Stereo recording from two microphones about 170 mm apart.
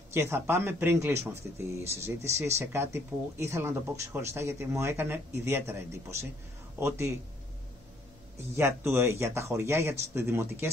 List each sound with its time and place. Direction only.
0.1 s speech: 15° right (ahead or behind)
8.5 s speech: 15° right (ahead or behind)